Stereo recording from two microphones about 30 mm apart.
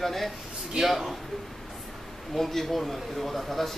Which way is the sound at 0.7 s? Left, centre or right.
Centre.